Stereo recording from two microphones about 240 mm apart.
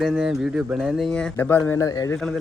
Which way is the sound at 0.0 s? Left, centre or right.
Centre.